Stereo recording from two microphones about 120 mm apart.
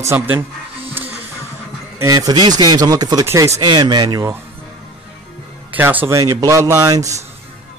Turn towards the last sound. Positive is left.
turn(degrees=-30)  # may be behind; listen again after turning